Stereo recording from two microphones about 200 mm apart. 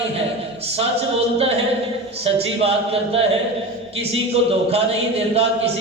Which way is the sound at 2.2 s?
30° right (ahead or behind).